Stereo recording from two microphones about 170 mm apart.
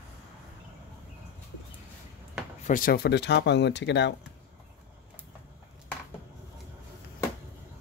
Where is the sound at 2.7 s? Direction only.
60° left (ahead or behind); by 4.2 s 90° left.